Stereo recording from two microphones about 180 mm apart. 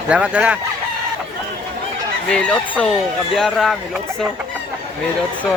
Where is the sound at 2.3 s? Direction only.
5° left (ahead or behind).